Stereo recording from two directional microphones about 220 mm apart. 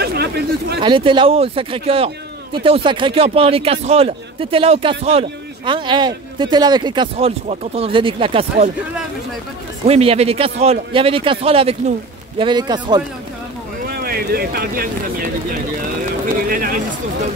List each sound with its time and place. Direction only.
0.0 s a sound: 45° right (ahead or behind)
0.7 s a man's voice: 25° right (ahead or behind)
9.8 s a man's voice: 30° right (ahead or behind)
13.9 s speech: 45° right (ahead or behind)
16.4 s speech: 40° right (ahead or behind)